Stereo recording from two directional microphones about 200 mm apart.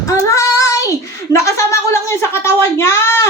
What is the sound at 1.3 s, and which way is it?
A woman's voice, 15° left (ahead or behind).